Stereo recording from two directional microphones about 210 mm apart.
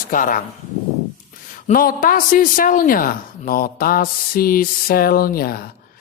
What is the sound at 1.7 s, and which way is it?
Speech, 45° left (ahead or behind).